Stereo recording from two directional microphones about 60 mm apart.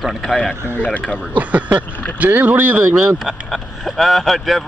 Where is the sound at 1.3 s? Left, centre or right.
Right.